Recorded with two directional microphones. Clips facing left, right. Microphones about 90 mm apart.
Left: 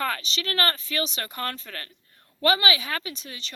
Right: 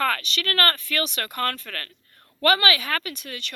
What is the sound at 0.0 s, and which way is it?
Speech, 50° right (ahead or behind).